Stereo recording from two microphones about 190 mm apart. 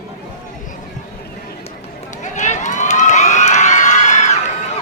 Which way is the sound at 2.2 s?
40° left (ahead or behind).